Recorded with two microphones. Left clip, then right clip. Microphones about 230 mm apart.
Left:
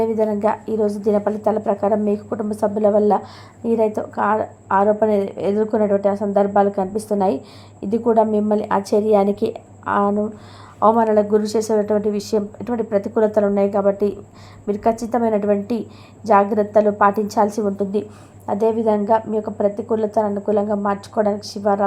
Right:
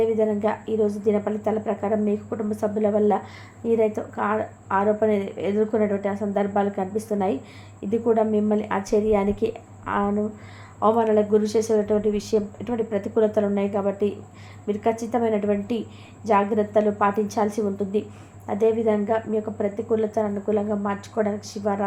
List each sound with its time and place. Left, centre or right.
0.0 s a woman's voice: left